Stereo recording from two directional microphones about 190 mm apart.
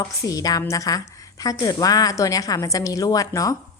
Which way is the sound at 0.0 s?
20° left (ahead or behind).